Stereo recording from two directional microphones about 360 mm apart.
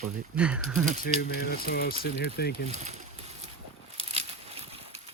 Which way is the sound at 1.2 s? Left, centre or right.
Left.